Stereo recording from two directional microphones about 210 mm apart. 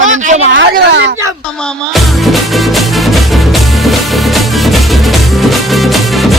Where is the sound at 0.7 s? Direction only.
55° right (ahead or behind).